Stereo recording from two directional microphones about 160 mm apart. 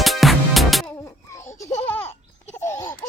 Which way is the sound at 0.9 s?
20° left (ahead or behind).